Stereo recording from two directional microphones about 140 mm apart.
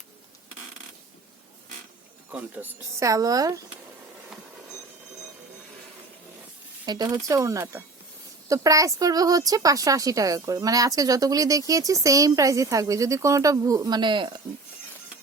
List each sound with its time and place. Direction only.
2.3 s speech: 10° right (ahead or behind)
6.8 s speech: 30° right (ahead or behind)